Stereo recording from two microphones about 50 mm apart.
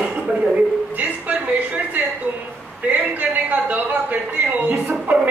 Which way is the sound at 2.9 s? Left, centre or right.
Right.